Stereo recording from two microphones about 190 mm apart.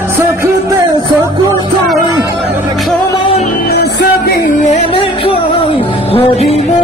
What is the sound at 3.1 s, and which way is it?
Music, 25° left (ahead or behind).